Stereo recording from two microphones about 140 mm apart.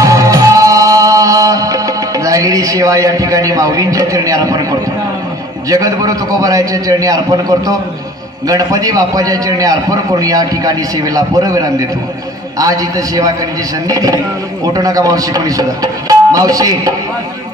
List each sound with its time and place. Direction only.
0.0 s music: 25° right (ahead or behind)
5.7 s a man's voice: 25° right (ahead or behind)